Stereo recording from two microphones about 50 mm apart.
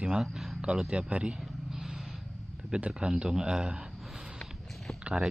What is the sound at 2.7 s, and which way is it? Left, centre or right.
Speech, centre.